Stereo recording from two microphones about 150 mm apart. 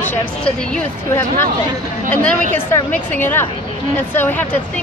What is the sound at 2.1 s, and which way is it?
Speech, 10° left (ahead or behind).